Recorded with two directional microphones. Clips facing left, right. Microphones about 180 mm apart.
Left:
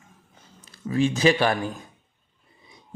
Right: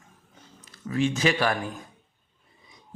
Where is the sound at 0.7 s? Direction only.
30° left (ahead or behind).